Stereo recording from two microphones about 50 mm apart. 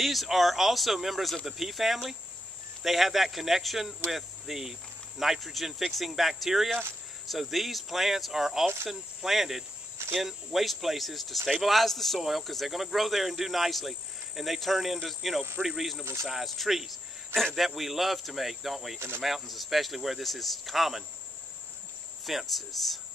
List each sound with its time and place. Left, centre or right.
0.0 s speech: centre
16.0 s speech: right
16.3 s speech: centre
18.9 s speech: right
19.2 s speech: centre
22.2 s speech: centre